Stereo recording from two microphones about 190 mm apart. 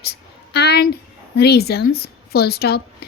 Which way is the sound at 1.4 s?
55° left (ahead or behind).